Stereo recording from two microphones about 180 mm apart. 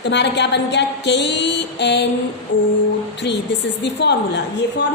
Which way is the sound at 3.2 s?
75° left (ahead or behind).